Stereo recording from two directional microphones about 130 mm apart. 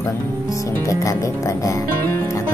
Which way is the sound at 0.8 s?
25° left (ahead or behind).